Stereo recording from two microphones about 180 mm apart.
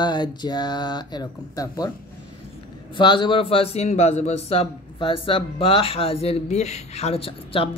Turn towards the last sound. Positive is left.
turn(degrees=30)  # may be behind; listen again after turning